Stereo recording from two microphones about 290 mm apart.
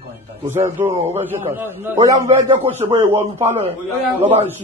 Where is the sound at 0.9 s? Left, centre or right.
Right.